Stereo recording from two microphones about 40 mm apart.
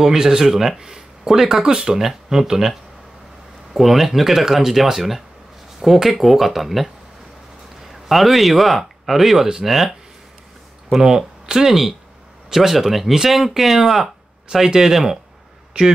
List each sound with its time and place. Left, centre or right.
0.0 s speech: centre
7.9 s speech: centre
15.8 s speech: right